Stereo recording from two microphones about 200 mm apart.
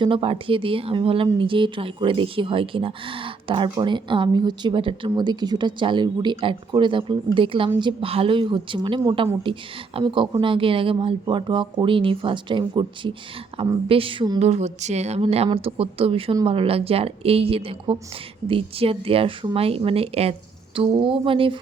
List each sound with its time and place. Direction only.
0.0 s a woman's voice: 25° right (ahead or behind)